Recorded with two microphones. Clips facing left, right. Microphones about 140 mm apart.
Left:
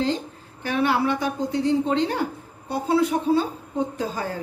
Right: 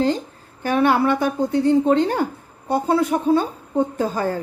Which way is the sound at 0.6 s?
50° right (ahead or behind).